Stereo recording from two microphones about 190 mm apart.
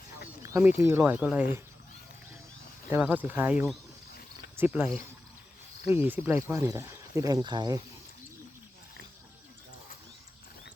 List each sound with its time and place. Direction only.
0.4 s a sound: 15° right (ahead or behind)
0.8 s speech: 15° right (ahead or behind)
2.9 s speech: 10° right (ahead or behind)
5.9 s speech: 10° right (ahead or behind)